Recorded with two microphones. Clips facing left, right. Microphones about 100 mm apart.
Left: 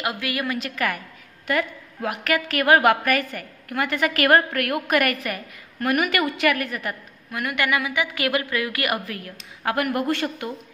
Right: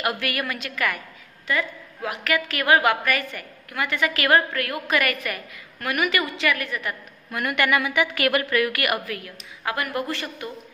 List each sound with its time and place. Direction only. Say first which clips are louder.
0.0 s a woman's voice: even; 15° left (ahead or behind)
0.5 s a woman's voice: left 2 dB; 35° left (ahead or behind)
1.5 s a woman's voice: left 2 dB; 50° left (ahead or behind)
6.5 s a woman's voice: left 1 dB; 40° left (ahead or behind)
7.2 s a woman's voice: right 1 dB; 5° left (ahead or behind); by 9.2 s 30° left (ahead or behind)
9.2 s a woman's voice: left 3 dB; 55° left (ahead or behind)